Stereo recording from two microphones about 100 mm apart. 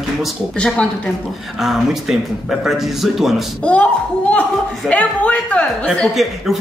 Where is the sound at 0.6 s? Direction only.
10° left (ahead or behind).